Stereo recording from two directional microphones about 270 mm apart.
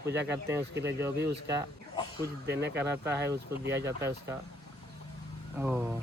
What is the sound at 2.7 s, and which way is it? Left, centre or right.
Speech, centre.